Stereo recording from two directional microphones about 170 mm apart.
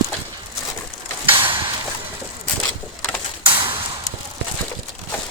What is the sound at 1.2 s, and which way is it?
Mechanisms, 30° right (ahead or behind).